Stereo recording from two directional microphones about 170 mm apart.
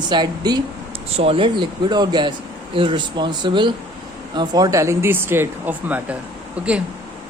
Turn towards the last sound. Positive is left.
turn(degrees=-5)  # may be behind; listen again after turning